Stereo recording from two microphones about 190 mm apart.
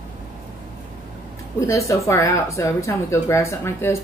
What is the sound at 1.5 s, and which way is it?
Speech, 15° left (ahead or behind).